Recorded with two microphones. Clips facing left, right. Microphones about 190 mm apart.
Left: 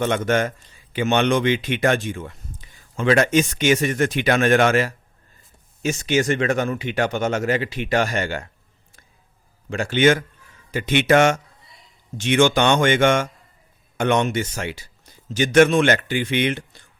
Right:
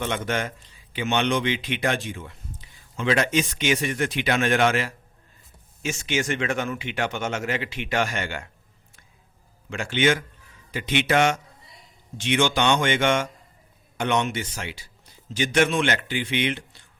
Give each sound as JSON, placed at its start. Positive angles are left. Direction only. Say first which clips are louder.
{"t": 0.0, "sound": "a man's voice", "louder": "left 7 dB", "side_deg": 45}
{"t": 9.6, "sound": "a man's voice", "louder": "left 5 dB", "side_deg": 35}